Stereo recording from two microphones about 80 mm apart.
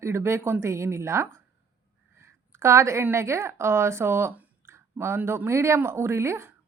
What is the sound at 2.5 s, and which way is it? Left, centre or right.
A woman's voice, right.